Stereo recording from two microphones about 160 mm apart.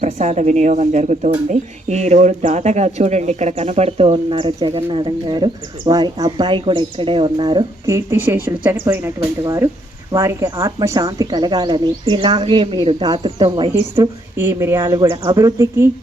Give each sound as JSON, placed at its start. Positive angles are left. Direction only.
{"t": 0.0, "sound": "speech", "side_deg": -50}
{"t": 13.9, "sound": "speech", "side_deg": -15}